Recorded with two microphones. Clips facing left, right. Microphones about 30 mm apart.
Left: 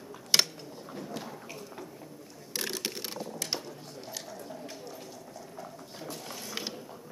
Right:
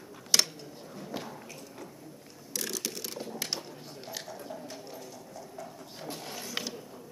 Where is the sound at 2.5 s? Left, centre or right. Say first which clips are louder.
Left 1 dB; left.